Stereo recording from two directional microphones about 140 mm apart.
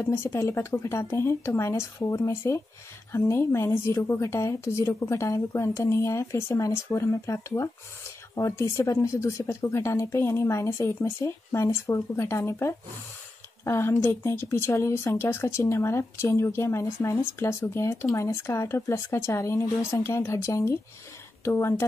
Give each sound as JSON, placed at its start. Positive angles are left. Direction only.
{"t": 0.0, "sound": "a woman's voice", "side_deg": 20}